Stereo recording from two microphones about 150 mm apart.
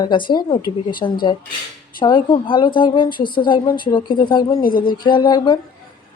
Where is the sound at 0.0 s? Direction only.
30° left (ahead or behind).